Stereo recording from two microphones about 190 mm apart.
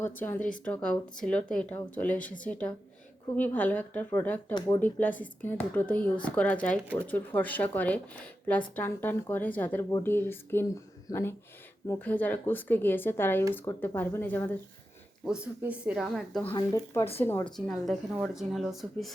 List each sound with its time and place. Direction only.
0.0 s speech: 10° left (ahead or behind)
4.5 s speech: 20° left (ahead or behind)
4.8 s speech: 10° left (ahead or behind)
15.2 s speech: 5° right (ahead or behind)
16.5 s speech: 20° left (ahead or behind)
17.7 s speech: centre (ahead or behind)